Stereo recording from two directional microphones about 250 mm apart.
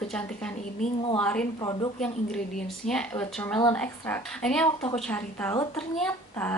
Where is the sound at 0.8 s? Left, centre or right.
Left.